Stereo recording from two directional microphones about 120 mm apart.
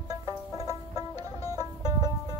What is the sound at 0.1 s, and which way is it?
Banjo, 30° right (ahead or behind).